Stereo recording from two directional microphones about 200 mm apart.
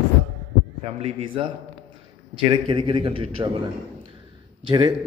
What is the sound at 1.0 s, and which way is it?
A man's voice, 25° right (ahead or behind).